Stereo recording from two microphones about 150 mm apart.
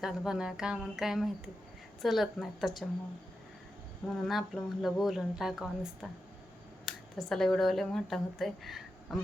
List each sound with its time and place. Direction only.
0.0 s speech: 5° right (ahead or behind)
4.1 s speech: centre (ahead or behind)